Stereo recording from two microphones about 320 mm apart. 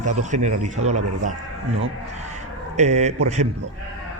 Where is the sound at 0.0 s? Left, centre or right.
Right.